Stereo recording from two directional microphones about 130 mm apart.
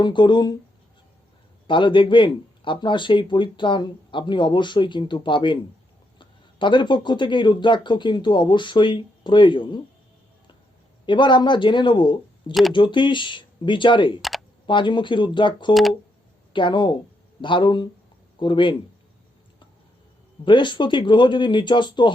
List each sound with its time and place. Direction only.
0.0 s speech: 35° left (ahead or behind)
1.6 s speech: 40° left (ahead or behind)
11.0 s speech: 35° left (ahead or behind)
14.2 s typing: centre (ahead or behind)
14.7 s speech: 35° left (ahead or behind)
15.7 s speech: centre (ahead or behind)
16.5 s speech: 35° left (ahead or behind)
20.4 s speech: 35° left (ahead or behind)